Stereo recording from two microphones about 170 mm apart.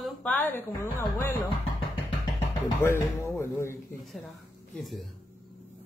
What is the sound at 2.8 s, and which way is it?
Speech, 15° left (ahead or behind).